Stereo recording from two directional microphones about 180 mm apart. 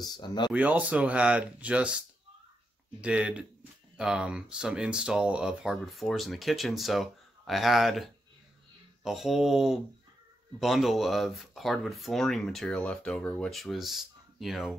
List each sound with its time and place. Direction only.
0.0 s speech: 25° left (ahead or behind)
0.5 s speech: 5° right (ahead or behind)